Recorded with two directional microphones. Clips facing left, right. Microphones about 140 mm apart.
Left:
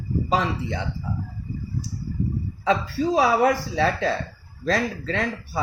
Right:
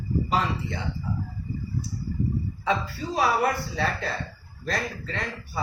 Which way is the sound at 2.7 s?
90° left.